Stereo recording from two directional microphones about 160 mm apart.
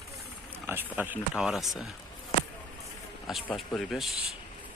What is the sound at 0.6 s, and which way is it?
Speech, 10° right (ahead or behind).